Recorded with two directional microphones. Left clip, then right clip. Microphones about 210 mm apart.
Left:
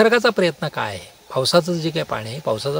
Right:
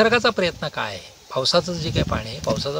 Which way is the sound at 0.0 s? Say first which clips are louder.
Left 2 dB; 40° left (ahead or behind).